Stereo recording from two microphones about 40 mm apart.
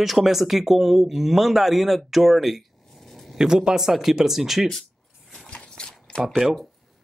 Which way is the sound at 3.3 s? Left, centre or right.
Centre.